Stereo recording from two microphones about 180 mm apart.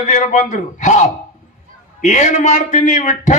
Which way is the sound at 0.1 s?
45° left (ahead or behind).